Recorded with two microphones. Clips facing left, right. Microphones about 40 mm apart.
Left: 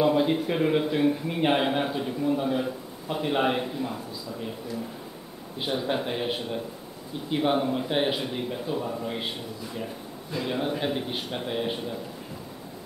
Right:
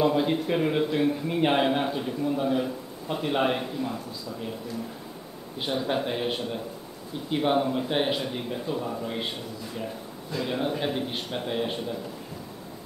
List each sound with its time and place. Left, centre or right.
0.0 s a man's voice: centre
5.6 s a man's voice: centre
10.3 s a man's voice: centre